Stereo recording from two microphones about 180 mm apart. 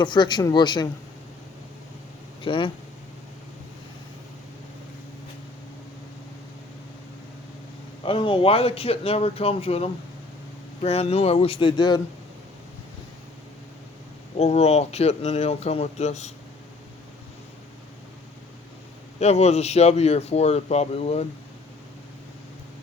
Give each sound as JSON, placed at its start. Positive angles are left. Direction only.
{"t": 0.0, "sound": "speech", "side_deg": 25}
{"t": 2.4, "sound": "speech", "side_deg": 30}
{"t": 8.0, "sound": "speech", "side_deg": 30}
{"t": 14.3, "sound": "speech", "side_deg": 35}
{"t": 19.2, "sound": "speech", "side_deg": 35}